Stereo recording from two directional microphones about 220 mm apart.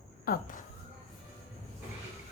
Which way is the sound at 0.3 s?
45° left (ahead or behind).